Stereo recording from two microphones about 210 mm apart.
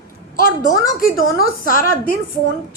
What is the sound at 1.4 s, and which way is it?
Speech, 40° left (ahead or behind).